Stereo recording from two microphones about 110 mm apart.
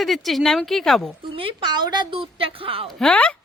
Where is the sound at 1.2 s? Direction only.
55° right (ahead or behind).